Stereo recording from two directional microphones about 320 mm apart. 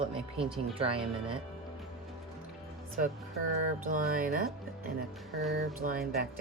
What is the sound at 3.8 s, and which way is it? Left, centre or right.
Speech, right.